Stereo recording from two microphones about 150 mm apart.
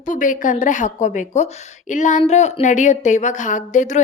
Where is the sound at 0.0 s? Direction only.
60° left (ahead or behind).